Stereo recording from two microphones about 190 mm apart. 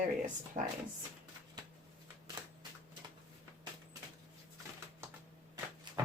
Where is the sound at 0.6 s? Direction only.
45° right (ahead or behind).